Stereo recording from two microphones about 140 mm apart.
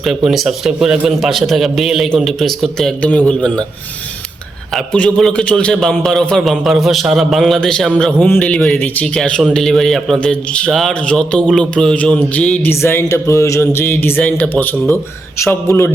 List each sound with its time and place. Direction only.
0.3 s a man's voice: 5° right (ahead or behind)
4.7 s a man's voice: 5° left (ahead or behind); by 15.5 s 20° left (ahead or behind)